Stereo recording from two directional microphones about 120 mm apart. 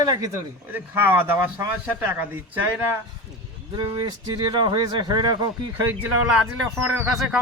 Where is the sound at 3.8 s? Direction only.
45° right (ahead or behind).